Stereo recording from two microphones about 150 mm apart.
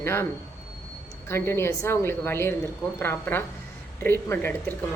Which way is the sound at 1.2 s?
15° left (ahead or behind).